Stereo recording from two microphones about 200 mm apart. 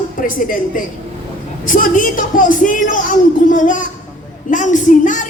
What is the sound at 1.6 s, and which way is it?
A woman's voice, 40° left (ahead or behind).